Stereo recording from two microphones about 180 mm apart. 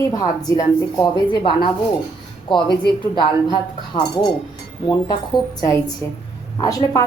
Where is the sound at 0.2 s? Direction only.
20° left (ahead or behind).